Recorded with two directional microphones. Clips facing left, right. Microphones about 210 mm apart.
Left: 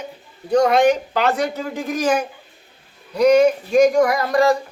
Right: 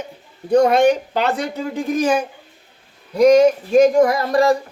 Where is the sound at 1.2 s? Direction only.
30° right (ahead or behind).